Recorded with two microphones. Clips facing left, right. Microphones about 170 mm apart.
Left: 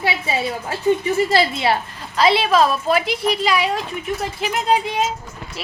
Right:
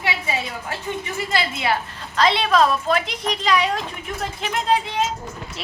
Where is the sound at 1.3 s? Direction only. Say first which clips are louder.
Left 5 dB; 30° left (ahead or behind).